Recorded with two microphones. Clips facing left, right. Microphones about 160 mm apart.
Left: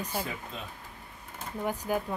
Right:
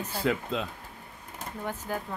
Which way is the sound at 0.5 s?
90° right.